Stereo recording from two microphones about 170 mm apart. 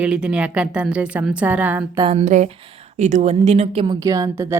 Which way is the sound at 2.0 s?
40° right (ahead or behind).